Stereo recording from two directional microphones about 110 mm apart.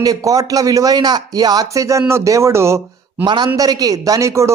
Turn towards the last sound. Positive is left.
turn(degrees=-30)  # may be behind; listen again after turning